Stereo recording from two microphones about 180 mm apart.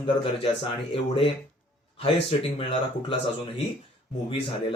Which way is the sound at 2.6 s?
30° left (ahead or behind).